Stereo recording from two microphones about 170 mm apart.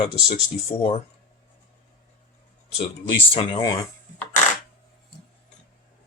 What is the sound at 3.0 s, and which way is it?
Speech, 30° left (ahead or behind).